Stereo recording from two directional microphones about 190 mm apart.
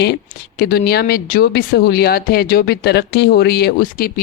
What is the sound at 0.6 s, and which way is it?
Speech, 55° left (ahead or behind).